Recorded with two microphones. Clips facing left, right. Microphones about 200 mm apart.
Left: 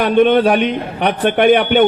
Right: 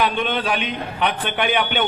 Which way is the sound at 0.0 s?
50° left (ahead or behind).